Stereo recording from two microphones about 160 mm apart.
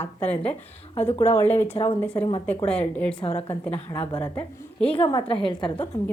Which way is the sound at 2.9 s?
10° left (ahead or behind).